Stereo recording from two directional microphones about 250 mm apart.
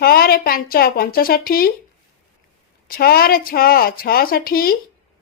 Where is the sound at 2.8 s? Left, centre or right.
Left.